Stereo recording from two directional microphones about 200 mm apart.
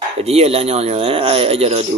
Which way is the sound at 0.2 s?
30° right (ahead or behind).